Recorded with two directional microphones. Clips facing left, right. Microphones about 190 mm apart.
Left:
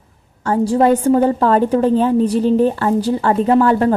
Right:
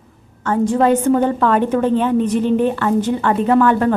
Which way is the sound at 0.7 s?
35° left (ahead or behind).